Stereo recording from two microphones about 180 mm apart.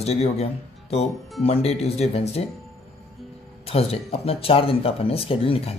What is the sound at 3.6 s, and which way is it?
Speech, 35° left (ahead or behind).